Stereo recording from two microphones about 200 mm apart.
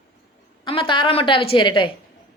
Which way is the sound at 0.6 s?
25° left (ahead or behind).